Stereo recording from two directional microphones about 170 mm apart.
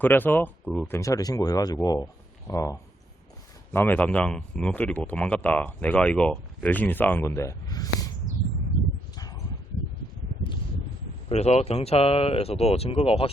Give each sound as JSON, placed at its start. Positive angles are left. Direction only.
{"t": 0.0, "sound": "speech", "side_deg": 10}
{"t": 0.9, "sound": "speech", "side_deg": 20}
{"t": 9.1, "sound": "a sound", "side_deg": 20}
{"t": 11.3, "sound": "speech", "side_deg": 40}